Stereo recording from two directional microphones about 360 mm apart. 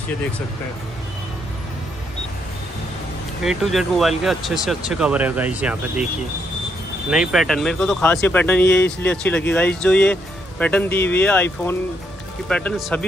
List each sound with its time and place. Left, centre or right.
3.4 s speech: centre
7.1 s speech: centre
8.6 s speech: left
9.0 s speech: centre